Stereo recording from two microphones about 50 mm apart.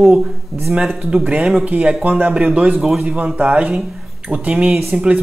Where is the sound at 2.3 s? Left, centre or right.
Right.